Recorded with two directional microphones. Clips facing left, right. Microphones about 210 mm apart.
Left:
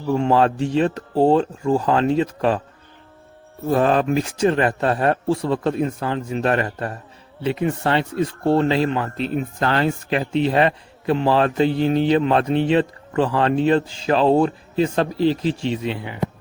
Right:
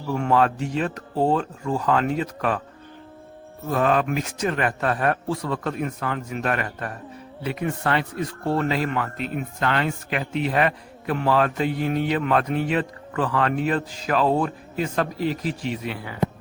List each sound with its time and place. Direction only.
0.1 s speech: 25° left (ahead or behind)
3.7 s speech: 35° left (ahead or behind)